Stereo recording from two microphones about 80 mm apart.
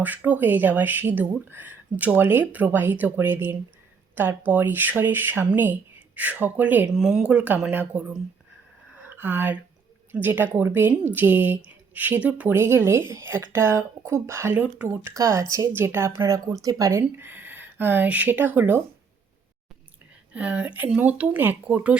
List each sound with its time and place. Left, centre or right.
0.0 s speech: right
6.8 s speech: centre
7.2 s speech: centre
9.0 s speech: right
14.5 s speech: centre
15.1 s speech: right
15.7 s speech: right
17.0 s speech: right
20.3 s speech: centre